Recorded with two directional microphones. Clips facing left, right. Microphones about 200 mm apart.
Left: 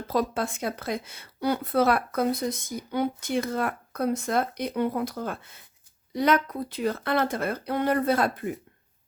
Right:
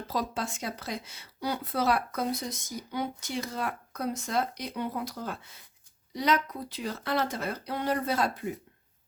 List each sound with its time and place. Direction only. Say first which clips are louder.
0.1 s a woman's voice: left 6 dB; 55° left (ahead or behind)